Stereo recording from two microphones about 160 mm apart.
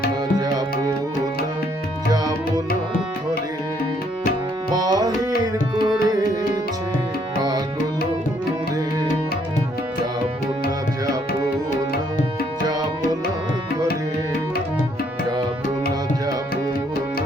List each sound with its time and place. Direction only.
0.3 s tabla: 25° right (ahead or behind)
4.7 s tabla: 25° right (ahead or behind)